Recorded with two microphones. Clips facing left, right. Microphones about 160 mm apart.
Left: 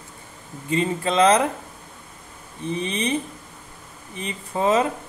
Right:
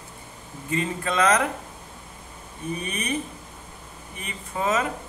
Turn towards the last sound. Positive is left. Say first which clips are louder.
# left 5 dB
turn(degrees=30)  # may be behind; listen again after turning